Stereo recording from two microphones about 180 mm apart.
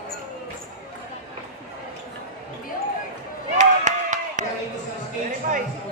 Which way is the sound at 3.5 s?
40° right (ahead or behind).